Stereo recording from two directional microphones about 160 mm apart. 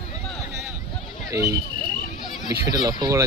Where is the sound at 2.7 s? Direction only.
25° right (ahead or behind).